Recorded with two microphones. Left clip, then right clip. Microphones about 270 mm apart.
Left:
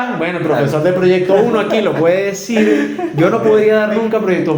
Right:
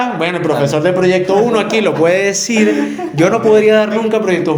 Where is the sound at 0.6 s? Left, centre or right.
Right.